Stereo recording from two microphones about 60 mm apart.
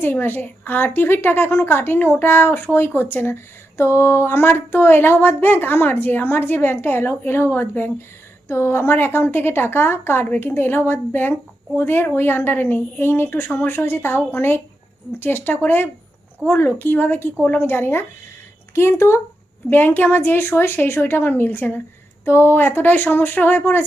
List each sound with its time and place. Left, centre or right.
0.0 s speech: left
8.4 s speech: left
19.7 s speech: left